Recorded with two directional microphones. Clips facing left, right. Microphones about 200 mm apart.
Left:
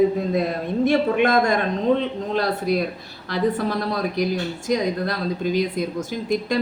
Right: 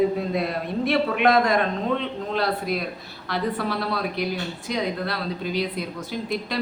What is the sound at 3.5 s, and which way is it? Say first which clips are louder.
A woman's voice: left 3 dB; 45° left (ahead or behind).